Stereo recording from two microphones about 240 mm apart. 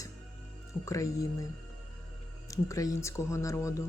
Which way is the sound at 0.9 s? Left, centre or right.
Centre.